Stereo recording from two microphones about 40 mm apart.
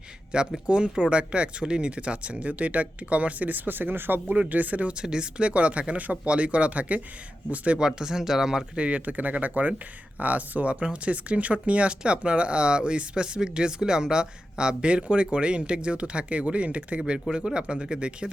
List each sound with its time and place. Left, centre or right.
0.3 s speech: right
4.3 s speech: right
4.9 s speech: right
7.8 s speech: centre
8.7 s speech: right
9.0 s speech: right
17.3 s speech: right